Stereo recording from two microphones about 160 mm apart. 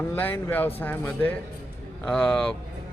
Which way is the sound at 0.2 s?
10° left (ahead or behind).